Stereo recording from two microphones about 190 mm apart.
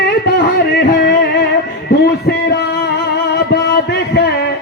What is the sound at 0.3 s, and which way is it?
Music, 60° left (ahead or behind).